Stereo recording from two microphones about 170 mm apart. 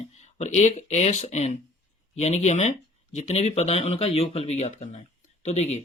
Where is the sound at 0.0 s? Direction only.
40° left (ahead or behind).